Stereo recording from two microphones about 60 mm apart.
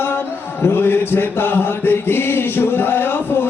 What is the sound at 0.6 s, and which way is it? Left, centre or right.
Chant, left.